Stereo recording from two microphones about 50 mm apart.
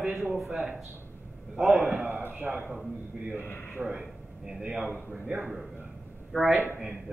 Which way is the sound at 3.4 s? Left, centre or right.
Left.